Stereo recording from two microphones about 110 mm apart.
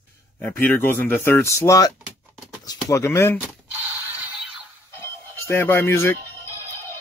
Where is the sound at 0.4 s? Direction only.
15° left (ahead or behind).